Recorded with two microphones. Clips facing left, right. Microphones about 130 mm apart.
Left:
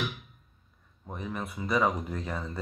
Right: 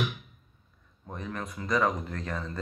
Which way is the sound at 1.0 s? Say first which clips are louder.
Left 1 dB; 10° left (ahead or behind).